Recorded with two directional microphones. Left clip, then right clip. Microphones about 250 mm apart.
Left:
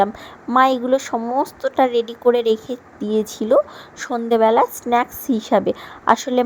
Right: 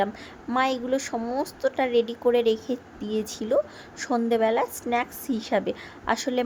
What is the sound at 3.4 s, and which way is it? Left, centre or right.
A woman's voice, centre.